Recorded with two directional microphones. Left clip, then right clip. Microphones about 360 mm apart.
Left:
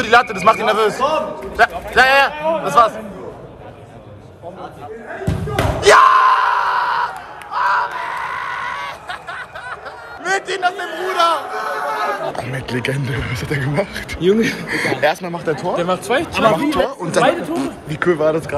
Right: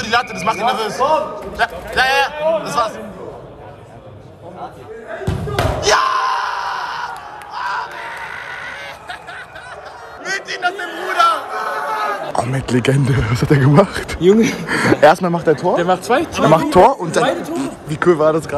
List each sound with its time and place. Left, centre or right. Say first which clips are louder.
0.0 s a man's voice: left 5 dB; centre
5.8 s gasp: left 7 dB; centre
7.5 s a sound: left 6 dB; centre
10.2 s chatter: left 2 dB; centre
12.4 s speech: right 5 dB; centre
14.2 s a man's voice: right 3 dB; centre
14.7 s speech: right 8 dB; right
17.0 s a man's voice: left 1 dB; centre